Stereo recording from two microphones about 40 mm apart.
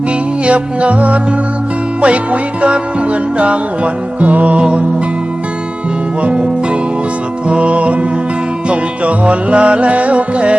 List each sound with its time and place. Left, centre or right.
0.4 s music: right
7.4 s music: right